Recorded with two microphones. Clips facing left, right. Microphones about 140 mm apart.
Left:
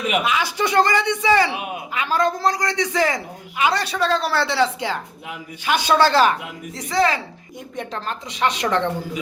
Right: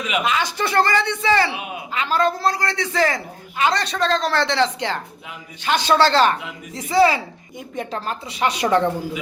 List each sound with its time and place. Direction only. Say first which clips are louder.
0.2 s a woman's voice: even; 5° left (ahead or behind)
6.7 s a woman's voice: right 4 dB; 5° right (ahead or behind)